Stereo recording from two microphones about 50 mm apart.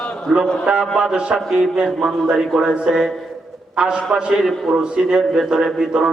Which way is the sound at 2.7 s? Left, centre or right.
Centre.